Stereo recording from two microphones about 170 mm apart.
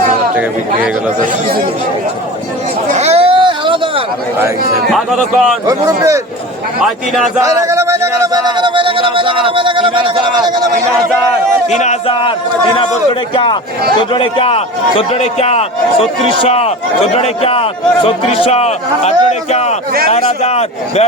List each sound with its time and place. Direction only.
2.9 s a sound: 40° right (ahead or behind)
4.9 s a man's voice: centre (ahead or behind)
5.6 s speech: 20° right (ahead or behind)
7.4 s speech: 20° right (ahead or behind)
11.7 s speech: 45° left (ahead or behind)
12.1 s a man's voice: 30° left (ahead or behind)